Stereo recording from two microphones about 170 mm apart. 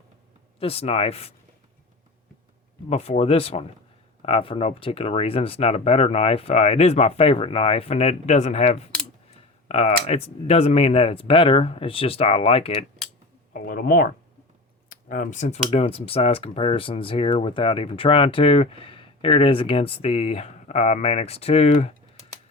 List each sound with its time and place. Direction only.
0.6 s speech: 35° left (ahead or behind)
2.9 s speech: 35° left (ahead or behind)
13.5 s speech: 55° left (ahead or behind); by 21.9 s 40° left (ahead or behind)